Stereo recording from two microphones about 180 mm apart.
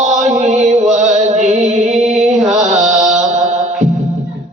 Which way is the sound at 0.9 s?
40° right (ahead or behind).